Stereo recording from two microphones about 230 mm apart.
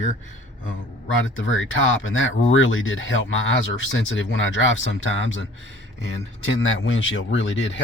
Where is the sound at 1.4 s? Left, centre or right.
Left.